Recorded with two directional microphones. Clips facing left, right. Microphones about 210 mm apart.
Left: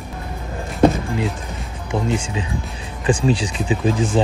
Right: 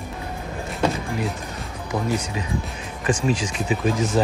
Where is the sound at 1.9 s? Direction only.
25° left (ahead or behind).